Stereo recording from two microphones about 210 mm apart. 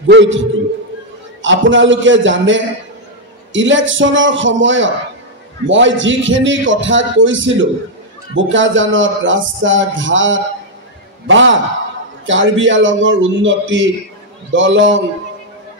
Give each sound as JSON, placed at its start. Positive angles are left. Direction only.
{"t": 0.1, "sound": "speech", "side_deg": -60}
{"t": 1.4, "sound": "speech", "side_deg": -65}